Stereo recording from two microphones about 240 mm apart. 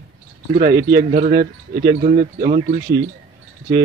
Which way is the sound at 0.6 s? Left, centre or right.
Right.